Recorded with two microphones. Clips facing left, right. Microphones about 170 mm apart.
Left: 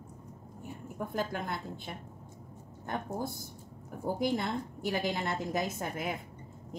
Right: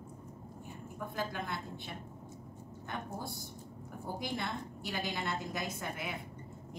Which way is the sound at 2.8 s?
45° left (ahead or behind).